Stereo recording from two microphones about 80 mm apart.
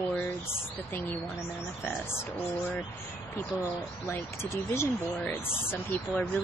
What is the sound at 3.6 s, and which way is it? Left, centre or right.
Speech, left.